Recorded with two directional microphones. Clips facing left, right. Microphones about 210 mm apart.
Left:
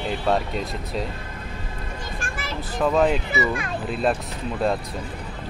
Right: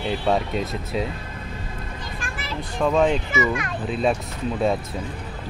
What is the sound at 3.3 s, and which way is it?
Speech, 35° left (ahead or behind).